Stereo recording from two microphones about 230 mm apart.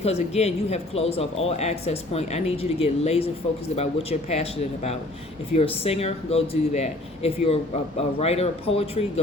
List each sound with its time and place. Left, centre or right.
0.0 s speech: left